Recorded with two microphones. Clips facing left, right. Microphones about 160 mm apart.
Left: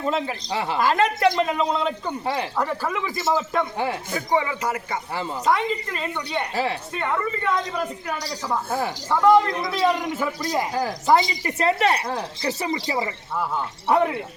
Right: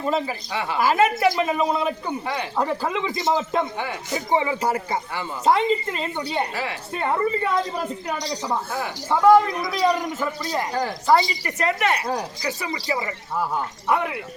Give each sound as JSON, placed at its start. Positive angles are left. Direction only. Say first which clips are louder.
{"t": 0.0, "sound": "a man's voice", "louder": "right 1 dB", "side_deg": 0}
{"t": 0.5, "sound": "speech", "louder": "left 2 dB", "side_deg": 30}
{"t": 0.8, "sound": "speech", "louder": "right 1 dB", "side_deg": -5}
{"t": 2.2, "sound": "speech", "louder": "left 5 dB", "side_deg": 30}
{"t": 2.6, "sound": "a woman's voice", "louder": "right 1 dB", "side_deg": -20}
{"t": 8.0, "sound": "speech", "louder": "right 2 dB", "side_deg": -20}
{"t": 9.7, "sound": "a man's voice", "louder": "right 1 dB", "side_deg": 0}
{"t": 11.0, "sound": "speech", "louder": "even", "side_deg": 20}